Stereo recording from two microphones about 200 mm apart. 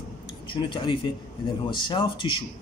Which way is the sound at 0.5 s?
25° left (ahead or behind).